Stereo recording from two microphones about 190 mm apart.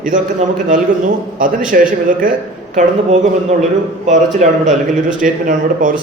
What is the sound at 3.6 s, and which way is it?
A man's voice, 35° right (ahead or behind).